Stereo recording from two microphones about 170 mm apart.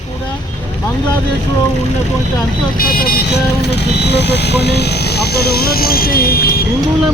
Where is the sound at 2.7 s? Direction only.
60° left (ahead or behind).